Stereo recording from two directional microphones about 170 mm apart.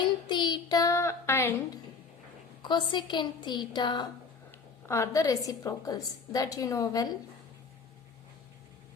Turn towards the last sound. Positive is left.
turn(degrees=20)  # may be behind; listen again after turning